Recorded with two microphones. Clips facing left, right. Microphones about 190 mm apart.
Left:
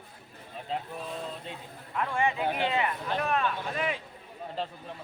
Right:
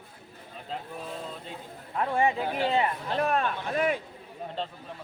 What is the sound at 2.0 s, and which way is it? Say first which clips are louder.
Speech: right 3 dB; 35° right (ahead or behind).